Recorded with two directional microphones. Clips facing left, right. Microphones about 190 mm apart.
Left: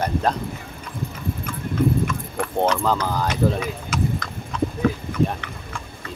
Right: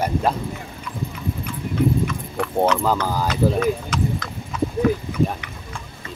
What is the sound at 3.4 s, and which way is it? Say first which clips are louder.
Speech: right 1 dB; 5° right (ahead or behind).